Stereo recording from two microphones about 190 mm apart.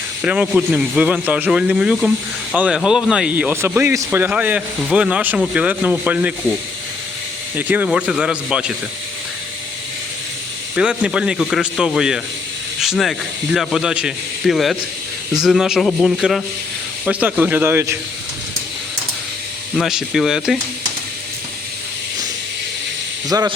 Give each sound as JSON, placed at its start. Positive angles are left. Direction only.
{"t": 0.2, "sound": "a man's voice", "side_deg": -5}
{"t": 7.5, "sound": "speech", "side_deg": -10}
{"t": 10.8, "sound": "a man's voice", "side_deg": -5}
{"t": 19.8, "sound": "speech", "side_deg": 0}
{"t": 23.3, "sound": "a man's voice", "side_deg": -20}